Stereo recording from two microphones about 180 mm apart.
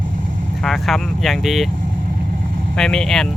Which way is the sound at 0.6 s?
Centre (ahead or behind).